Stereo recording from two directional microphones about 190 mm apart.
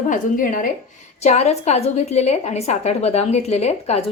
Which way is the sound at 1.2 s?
35° left (ahead or behind).